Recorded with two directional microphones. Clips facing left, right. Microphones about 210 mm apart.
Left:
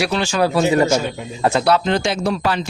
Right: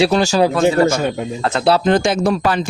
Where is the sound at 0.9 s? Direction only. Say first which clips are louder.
Right 2 dB; 55° right (ahead or behind).